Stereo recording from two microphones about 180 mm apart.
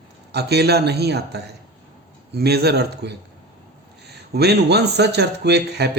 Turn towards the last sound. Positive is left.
turn(degrees=-65)  # may be behind; listen again after turning